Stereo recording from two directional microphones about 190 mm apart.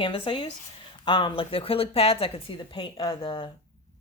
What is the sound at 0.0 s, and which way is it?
Speech, 25° left (ahead or behind).